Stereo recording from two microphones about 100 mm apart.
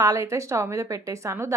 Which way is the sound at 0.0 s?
35° right (ahead or behind).